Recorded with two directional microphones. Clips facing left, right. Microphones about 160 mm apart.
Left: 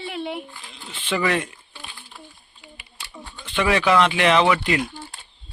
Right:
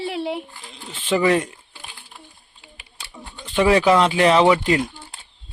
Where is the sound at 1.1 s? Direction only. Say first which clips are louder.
Right 5 dB; 30° right (ahead or behind).